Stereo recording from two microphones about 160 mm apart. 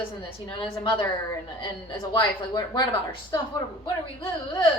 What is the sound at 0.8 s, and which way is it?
Speech, 20° left (ahead or behind).